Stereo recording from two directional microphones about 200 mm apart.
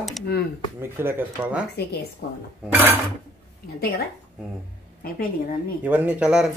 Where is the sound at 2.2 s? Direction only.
50° left (ahead or behind).